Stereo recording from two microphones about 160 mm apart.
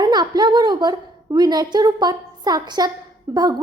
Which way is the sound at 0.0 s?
25° right (ahead or behind).